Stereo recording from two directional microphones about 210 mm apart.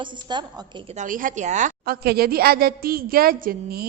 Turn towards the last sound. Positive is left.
turn(degrees=-45)  # may be behind; listen again after turning